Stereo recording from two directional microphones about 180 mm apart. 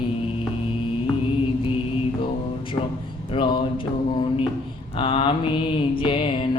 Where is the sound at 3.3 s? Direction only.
30° left (ahead or behind).